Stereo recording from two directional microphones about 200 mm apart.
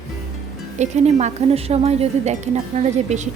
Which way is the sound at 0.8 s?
35° right (ahead or behind).